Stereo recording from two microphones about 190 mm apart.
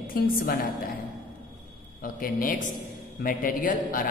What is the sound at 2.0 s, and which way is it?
A woman's voice, 50° left (ahead or behind).